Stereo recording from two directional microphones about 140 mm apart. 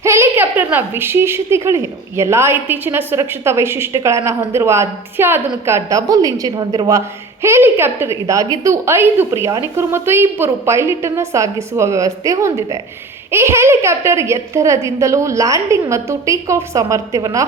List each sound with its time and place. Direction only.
0.0 s a woman's voice: 20° right (ahead or behind)